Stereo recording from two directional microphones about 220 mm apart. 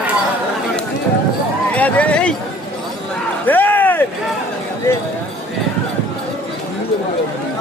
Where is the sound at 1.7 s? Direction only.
5° left (ahead or behind).